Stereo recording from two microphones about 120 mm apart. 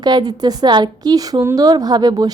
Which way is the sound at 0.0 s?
35° right (ahead or behind).